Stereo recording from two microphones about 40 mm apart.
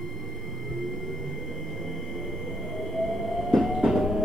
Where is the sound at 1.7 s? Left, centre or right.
Centre.